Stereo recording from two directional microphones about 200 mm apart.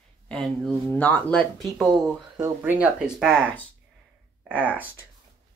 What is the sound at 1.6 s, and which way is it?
Speech, 20° right (ahead or behind).